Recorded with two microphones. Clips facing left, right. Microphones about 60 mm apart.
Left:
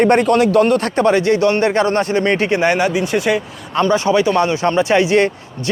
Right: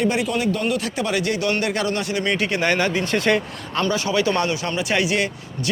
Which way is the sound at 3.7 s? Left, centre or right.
Left.